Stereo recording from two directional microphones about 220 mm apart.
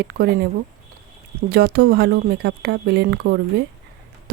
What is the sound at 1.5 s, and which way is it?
Speech, 45° right (ahead or behind).